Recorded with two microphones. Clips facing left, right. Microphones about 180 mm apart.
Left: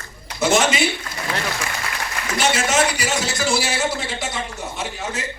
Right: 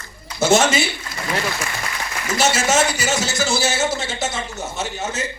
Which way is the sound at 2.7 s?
25° right (ahead or behind).